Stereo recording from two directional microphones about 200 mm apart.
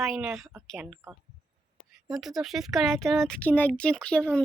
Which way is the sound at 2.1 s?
Centre (ahead or behind).